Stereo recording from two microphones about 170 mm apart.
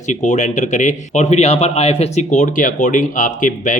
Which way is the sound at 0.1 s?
45° left (ahead or behind).